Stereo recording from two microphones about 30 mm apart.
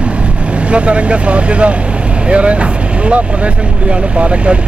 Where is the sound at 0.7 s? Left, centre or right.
Right.